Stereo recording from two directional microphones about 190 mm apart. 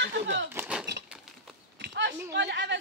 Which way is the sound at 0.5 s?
10° right (ahead or behind).